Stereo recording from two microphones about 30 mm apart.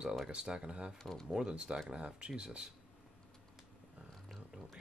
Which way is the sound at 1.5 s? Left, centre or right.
Right.